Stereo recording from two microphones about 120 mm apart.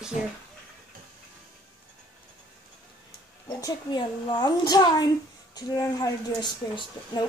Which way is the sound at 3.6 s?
35° left (ahead or behind).